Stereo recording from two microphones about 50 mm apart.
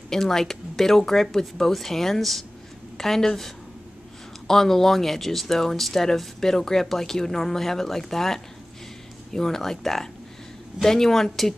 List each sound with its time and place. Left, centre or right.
0.1 s speech: centre